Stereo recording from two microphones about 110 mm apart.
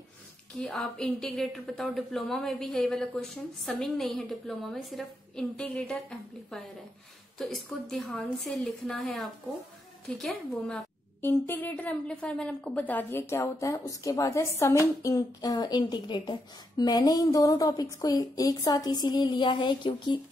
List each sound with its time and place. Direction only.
0.6 s a woman's voice: 5° left (ahead or behind)
11.1 s a woman's voice: 20° left (ahead or behind); by 20.2 s 45° left (ahead or behind)